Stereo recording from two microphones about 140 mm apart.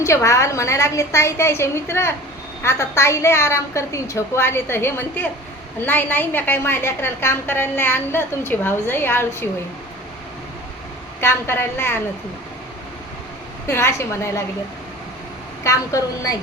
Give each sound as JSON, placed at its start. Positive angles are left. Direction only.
{"t": 0.0, "sound": "a woman's voice", "side_deg": 20}
{"t": 11.2, "sound": "a woman's voice", "side_deg": 15}
{"t": 13.7, "sound": "a woman's voice", "side_deg": 20}
{"t": 15.6, "sound": "a woman's voice", "side_deg": 25}